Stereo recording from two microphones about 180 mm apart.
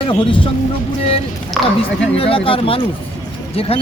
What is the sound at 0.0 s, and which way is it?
Speech, 25° left (ahead or behind).